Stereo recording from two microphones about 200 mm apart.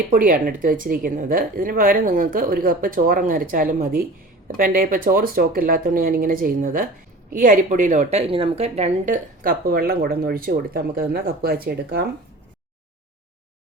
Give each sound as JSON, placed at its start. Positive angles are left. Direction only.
{"t": 0.1, "sound": "a woman's voice", "side_deg": -45}